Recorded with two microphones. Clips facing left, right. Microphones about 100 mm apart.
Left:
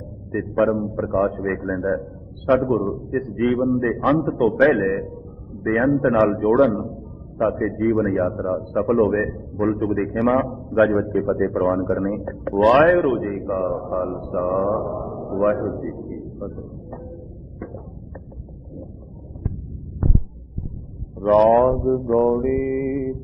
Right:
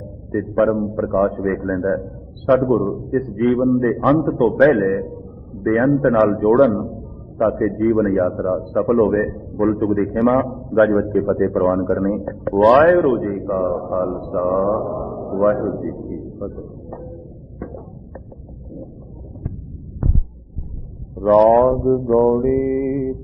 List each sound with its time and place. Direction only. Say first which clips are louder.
0.3 s a man's voice: right 2 dB; 5° right (ahead or behind)
1.6 s a man's voice: right 2 dB; 10° right (ahead or behind)
2.6 s a man's voice: right 3 dB; centre (ahead or behind)
4.4 s a man's voice: right 2 dB; 15° right (ahead or behind)
4.7 s a man's voice: right 3 dB; centre (ahead or behind)
5.6 s a man's voice: right 3 dB; 10° right (ahead or behind)
5.9 s a man's voice: right 1 dB; centre (ahead or behind)
10.3 s a man's voice: right 2 dB; centre (ahead or behind)
12.5 s a man's voice: right 3 dB; 15° right (ahead or behind)
12.9 s a man's voice: right 3 dB; centre (ahead or behind)
15.6 s a sound: right 3 dB; centre (ahead or behind)
16.6 s a sound: right 3 dB; 10° right (ahead or behind)
17.6 s arrow: right 3 dB; centre (ahead or behind)
21.2 s a man's voice: right 3 dB; 5° right (ahead or behind)